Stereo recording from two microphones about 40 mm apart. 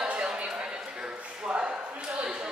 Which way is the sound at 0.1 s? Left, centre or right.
Right.